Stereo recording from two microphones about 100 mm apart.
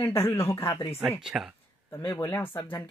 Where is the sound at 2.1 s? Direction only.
30° left (ahead or behind).